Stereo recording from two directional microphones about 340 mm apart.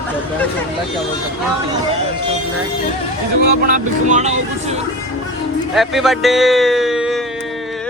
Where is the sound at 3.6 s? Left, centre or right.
Right.